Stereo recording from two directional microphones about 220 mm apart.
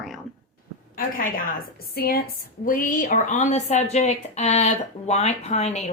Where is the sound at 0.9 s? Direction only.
40° left (ahead or behind).